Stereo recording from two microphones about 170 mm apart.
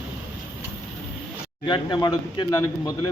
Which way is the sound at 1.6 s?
25° left (ahead or behind).